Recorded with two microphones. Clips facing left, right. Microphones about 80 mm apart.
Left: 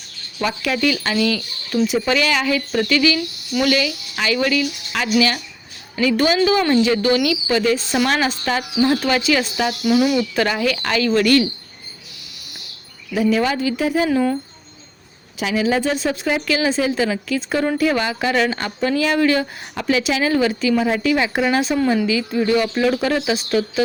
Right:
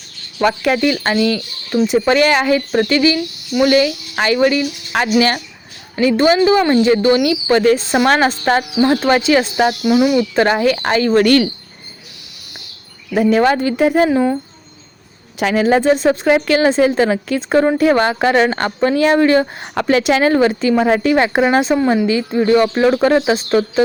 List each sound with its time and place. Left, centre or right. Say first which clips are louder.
0.4 s speech: right 5 dB; right
2.0 s speech: right 6 dB; right
7.5 s a woman's voice: right 7 dB; right
8.8 s speech: right 2 dB; right
9.8 s speech: right 1 dB; centre
10.3 s speech: right 6 dB; right
13.1 s a woman's voice: right 5 dB; right
14.1 s speech: right 3 dB; right
15.4 s a woman's voice: right 5 dB; right
19.7 s a woman's voice: right 6 dB; right